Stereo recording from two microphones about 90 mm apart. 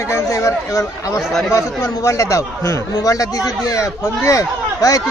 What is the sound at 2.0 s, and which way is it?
A man's voice, 35° left (ahead or behind).